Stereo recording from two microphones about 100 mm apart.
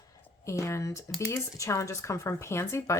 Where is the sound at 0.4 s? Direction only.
30° left (ahead or behind).